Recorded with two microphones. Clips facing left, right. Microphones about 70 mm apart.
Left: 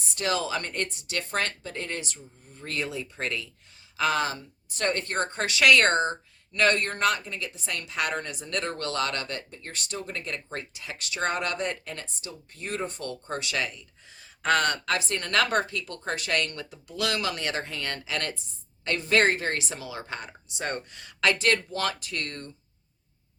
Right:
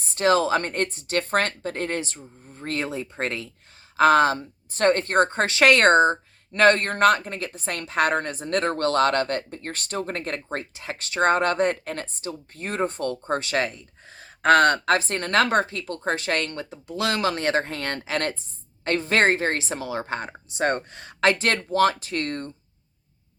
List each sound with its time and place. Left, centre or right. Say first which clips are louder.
0.1 s a woman's voice: right 8 dB; right